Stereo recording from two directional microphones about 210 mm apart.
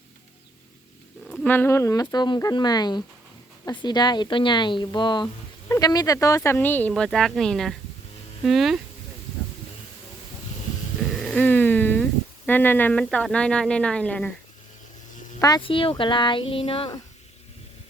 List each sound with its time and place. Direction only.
1.5 s a woman's voice: 10° left (ahead or behind)
11.2 s a sound: 5° left (ahead or behind)
12.5 s a woman's voice: 10° left (ahead or behind)
15.4 s speech: 20° left (ahead or behind)